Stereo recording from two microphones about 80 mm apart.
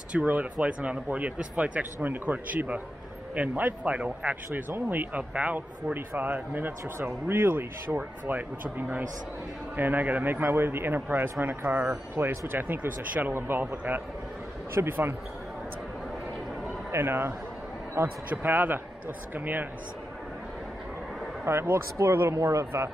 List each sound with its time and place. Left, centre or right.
0.1 s speech: centre
9.8 s speech: right
16.9 s speech: right
21.5 s speech: right